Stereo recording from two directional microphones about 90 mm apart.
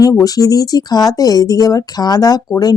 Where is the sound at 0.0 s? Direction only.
40° left (ahead or behind).